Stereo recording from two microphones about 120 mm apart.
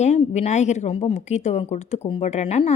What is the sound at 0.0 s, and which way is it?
Speech, 70° left (ahead or behind).